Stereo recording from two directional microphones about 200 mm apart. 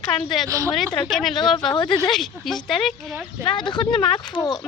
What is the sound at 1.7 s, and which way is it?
Speech, 25° left (ahead or behind).